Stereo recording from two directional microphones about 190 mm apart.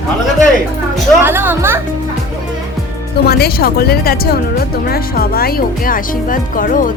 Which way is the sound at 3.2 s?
55° left (ahead or behind).